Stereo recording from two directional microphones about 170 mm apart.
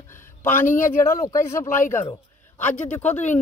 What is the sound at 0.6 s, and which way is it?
Speech, 50° left (ahead or behind).